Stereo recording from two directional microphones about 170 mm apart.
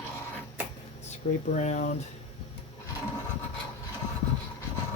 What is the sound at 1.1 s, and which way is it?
Speech, 45° left (ahead or behind).